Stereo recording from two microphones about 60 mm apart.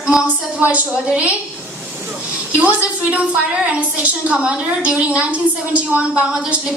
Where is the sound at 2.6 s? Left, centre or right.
Right.